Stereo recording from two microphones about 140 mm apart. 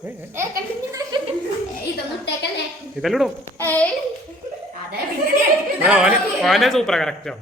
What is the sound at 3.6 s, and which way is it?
Speech, 10° left (ahead or behind).